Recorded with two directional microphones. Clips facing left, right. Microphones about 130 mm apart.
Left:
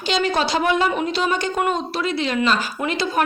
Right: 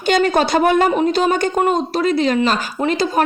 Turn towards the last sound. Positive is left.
turn(degrees=-40)  # may be behind; listen again after turning